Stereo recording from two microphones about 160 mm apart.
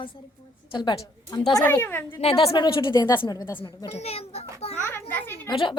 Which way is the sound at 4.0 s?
40° left (ahead or behind).